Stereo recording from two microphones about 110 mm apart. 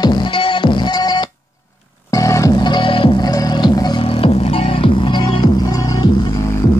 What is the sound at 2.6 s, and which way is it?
Music, 45° left (ahead or behind).